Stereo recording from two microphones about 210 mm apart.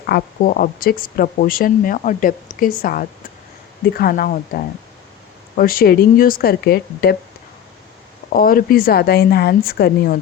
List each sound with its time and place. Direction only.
0.0 s speech: 45° left (ahead or behind)
8.3 s speech: 45° left (ahead or behind)